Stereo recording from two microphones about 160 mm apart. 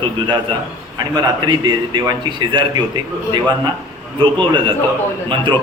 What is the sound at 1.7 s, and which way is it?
A man's voice, 25° right (ahead or behind).